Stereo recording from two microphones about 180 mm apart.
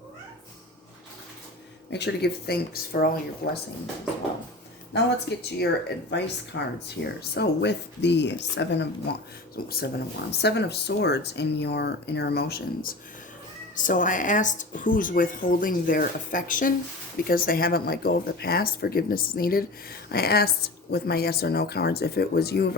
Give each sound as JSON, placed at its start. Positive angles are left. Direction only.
{"t": 1.9, "sound": "speech", "side_deg": 70}
{"t": 4.9, "sound": "speech", "side_deg": 65}
{"t": 13.7, "sound": "speech", "side_deg": 45}